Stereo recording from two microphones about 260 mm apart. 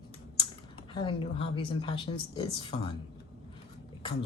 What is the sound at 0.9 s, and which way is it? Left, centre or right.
Speech, left.